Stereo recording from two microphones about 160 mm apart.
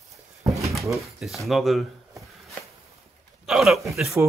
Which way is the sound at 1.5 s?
Centre (ahead or behind).